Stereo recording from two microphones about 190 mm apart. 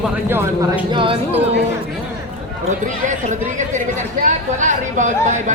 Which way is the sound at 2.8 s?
40° right (ahead or behind).